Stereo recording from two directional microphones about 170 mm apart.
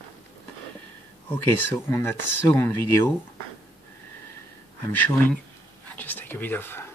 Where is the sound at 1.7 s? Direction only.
15° left (ahead or behind).